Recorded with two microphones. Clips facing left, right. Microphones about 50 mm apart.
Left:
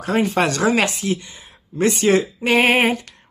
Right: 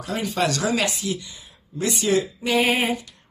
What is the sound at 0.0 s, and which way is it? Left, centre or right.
Speech, left.